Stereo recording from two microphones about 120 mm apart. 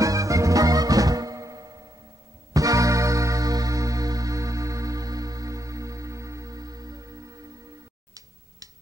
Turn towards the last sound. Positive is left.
turn(degrees=-30)  # may be behind; listen again after turning